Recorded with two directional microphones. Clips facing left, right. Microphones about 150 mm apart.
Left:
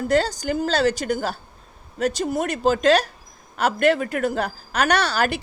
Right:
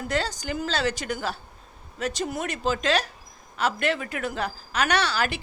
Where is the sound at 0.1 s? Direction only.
40° left (ahead or behind).